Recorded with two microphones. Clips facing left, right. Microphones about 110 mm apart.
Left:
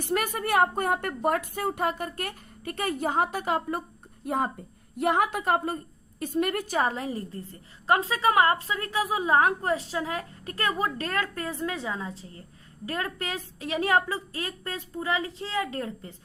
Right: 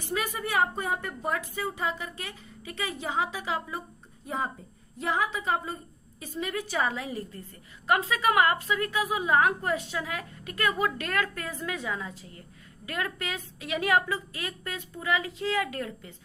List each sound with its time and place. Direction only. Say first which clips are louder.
0.0 s a woman's voice: left 4 dB; 55° left (ahead or behind); by 16.1 s 35° left (ahead or behind)